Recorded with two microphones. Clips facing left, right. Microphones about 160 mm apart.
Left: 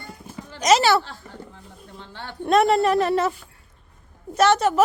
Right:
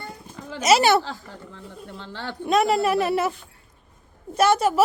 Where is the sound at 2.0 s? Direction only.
90° right.